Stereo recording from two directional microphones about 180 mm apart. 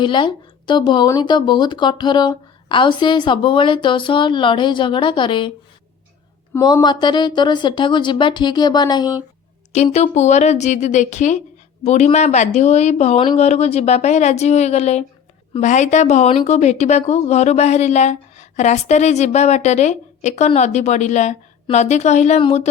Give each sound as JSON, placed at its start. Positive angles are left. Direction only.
{"t": 0.0, "sound": "speech", "side_deg": 25}
{"t": 6.5, "sound": "speech", "side_deg": 20}
{"t": 9.7, "sound": "speech", "side_deg": 35}